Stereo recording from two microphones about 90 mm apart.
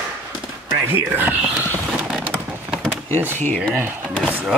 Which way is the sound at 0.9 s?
20° right (ahead or behind).